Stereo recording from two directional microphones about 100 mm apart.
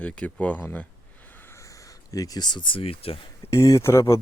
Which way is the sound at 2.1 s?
40° left (ahead or behind).